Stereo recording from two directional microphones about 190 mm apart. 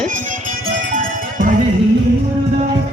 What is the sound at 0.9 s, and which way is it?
Music, 45° right (ahead or behind).